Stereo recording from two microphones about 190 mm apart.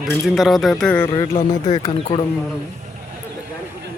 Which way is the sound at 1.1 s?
20° left (ahead or behind).